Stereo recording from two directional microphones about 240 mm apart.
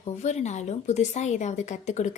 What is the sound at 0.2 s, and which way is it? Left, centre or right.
A woman's voice, left.